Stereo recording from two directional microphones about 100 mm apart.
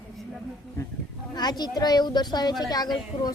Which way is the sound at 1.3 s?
45° left (ahead or behind).